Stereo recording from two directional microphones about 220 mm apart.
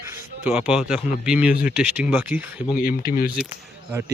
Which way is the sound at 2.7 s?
40° left (ahead or behind).